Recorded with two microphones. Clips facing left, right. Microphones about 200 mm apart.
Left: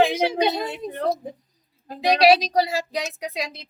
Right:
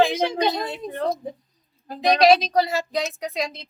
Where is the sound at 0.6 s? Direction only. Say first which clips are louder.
Left 1 dB; 20° left (ahead or behind).